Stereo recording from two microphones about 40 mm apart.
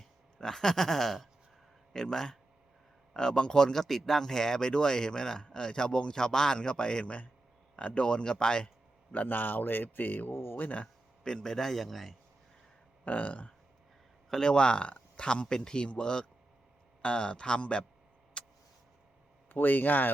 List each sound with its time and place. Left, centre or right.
0.3 s speech: centre
9.2 s speech: left
10.6 s speech: left
11.2 s speech: centre
13.1 s speech: left
14.4 s speech: left
18.4 s a sound: left
19.5 s speech: left